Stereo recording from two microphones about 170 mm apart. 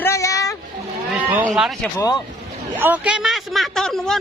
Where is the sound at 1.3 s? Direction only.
5° right (ahead or behind).